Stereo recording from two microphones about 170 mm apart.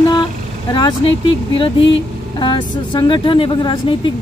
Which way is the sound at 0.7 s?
25° left (ahead or behind).